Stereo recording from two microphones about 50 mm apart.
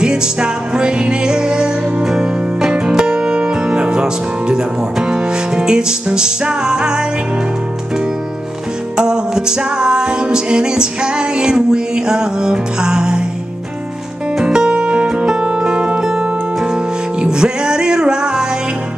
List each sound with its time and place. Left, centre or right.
0.0 s music: centre
8.9 s music: centre
14.4 s music: centre